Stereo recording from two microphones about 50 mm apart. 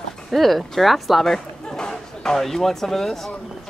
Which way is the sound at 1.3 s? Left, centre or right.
Centre.